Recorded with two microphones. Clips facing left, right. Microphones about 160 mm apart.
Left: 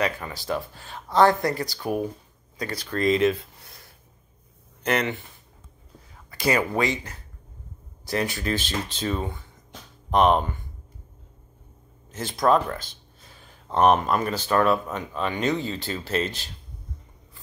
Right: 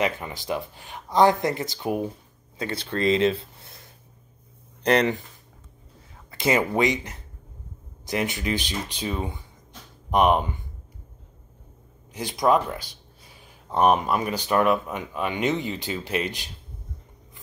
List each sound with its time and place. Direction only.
0.0 s speech: 20° right (ahead or behind)
4.8 s speech: 35° right (ahead or behind)
6.3 s speech: 20° right (ahead or behind)
12.1 s speech: 15° right (ahead or behind)